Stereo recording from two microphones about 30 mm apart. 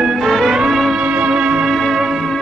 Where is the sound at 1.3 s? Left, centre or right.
Right.